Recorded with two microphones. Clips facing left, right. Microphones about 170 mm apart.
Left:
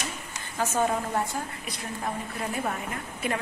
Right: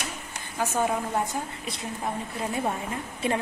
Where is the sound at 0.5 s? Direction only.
10° right (ahead or behind).